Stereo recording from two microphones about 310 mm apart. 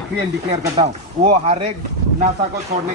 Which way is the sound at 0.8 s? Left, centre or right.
Right.